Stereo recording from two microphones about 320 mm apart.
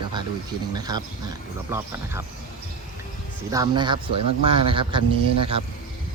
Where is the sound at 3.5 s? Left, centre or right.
Centre.